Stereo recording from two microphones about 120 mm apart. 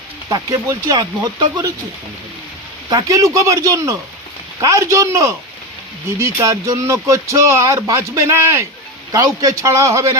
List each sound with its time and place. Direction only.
0.3 s speech: 30° right (ahead or behind)
2.9 s speech: 30° right (ahead or behind)